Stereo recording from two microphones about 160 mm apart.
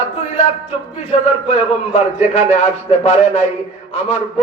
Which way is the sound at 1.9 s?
45° left (ahead or behind).